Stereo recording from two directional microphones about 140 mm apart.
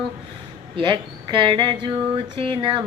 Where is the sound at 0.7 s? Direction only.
35° right (ahead or behind).